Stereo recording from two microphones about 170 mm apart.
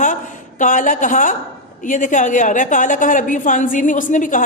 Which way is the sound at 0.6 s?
50° left (ahead or behind).